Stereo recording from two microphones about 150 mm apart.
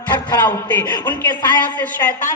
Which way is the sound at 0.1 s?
30° left (ahead or behind).